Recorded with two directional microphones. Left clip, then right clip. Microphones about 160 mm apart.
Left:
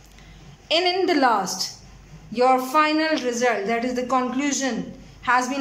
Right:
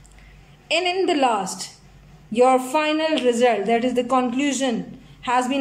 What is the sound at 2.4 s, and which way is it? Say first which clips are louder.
Speech: right 1 dB; 20° right (ahead or behind).